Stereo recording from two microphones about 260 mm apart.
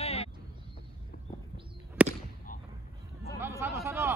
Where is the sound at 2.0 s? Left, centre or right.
Centre.